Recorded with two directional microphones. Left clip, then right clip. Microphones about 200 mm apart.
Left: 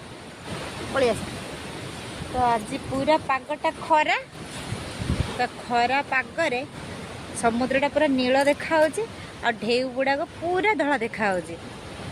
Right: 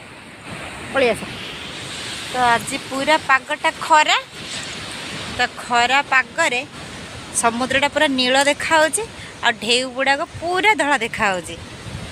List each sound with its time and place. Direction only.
0.9 s speech: 30° right (ahead or behind)
2.4 s speech: 5° right (ahead or behind)
5.4 s speech: centre (ahead or behind)